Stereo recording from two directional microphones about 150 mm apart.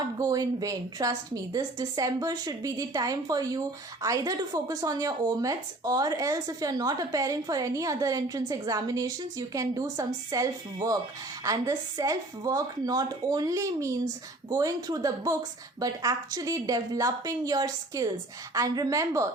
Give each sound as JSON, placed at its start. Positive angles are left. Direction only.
{"t": 0.2, "sound": "speech", "side_deg": -25}